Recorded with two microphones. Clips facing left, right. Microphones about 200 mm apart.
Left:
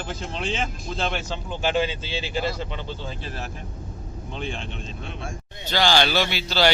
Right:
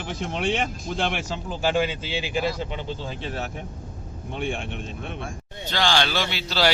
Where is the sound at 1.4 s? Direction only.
10° right (ahead or behind).